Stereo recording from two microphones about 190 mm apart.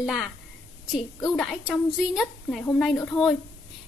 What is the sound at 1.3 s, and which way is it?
A woman's voice, centre (ahead or behind).